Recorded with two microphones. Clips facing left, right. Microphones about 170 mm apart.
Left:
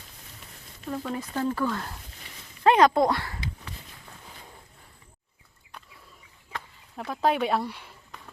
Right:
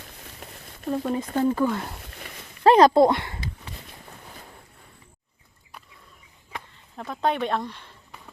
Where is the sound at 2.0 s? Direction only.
65° right (ahead or behind).